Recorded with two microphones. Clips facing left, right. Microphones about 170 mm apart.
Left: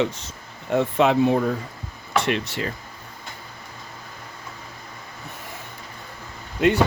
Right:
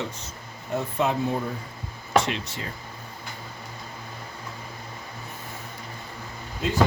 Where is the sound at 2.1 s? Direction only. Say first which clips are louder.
Left 1 dB; 65° left (ahead or behind).